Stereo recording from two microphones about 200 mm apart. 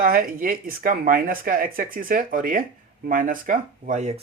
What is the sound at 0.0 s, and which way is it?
Speech, 45° right (ahead or behind).